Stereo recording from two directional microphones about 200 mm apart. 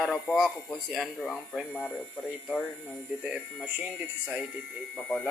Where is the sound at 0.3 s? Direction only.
Centre (ahead or behind).